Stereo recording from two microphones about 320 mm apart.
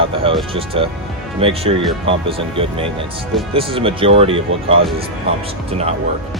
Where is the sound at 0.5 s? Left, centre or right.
Centre.